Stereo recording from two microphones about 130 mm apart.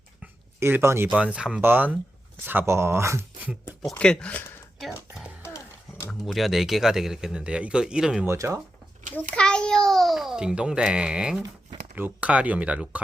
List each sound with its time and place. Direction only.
0.6 s speech: 20° right (ahead or behind)
3.5 s speech: 5° right (ahead or behind)
3.9 s speech: 10° left (ahead or behind)
4.8 s music: 5° right (ahead or behind)
6.1 s speech: centre (ahead or behind)
8.3 s speech: 20° right (ahead or behind)
9.1 s babbling: 10° left (ahead or behind)
11.9 s speech: 15° right (ahead or behind)